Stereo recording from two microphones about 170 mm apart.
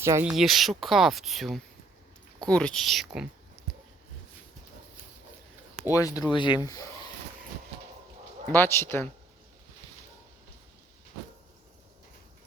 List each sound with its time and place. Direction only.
0.0 s speech: 15° right (ahead or behind)
0.3 s speech: centre (ahead or behind)
5.9 s speech: 20° left (ahead or behind)
8.5 s speech: 15° left (ahead or behind)